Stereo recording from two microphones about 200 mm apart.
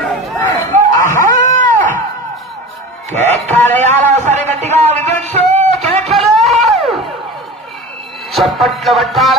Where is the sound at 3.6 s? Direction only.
35° right (ahead or behind).